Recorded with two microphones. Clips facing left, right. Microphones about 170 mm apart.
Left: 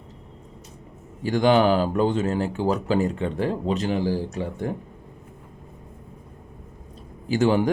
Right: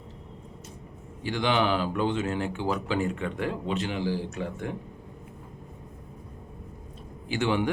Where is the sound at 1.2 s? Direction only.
45° left (ahead or behind).